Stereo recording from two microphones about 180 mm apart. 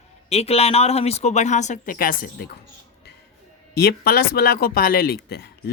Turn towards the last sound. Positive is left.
turn(degrees=60)  # may be behind; listen again after turning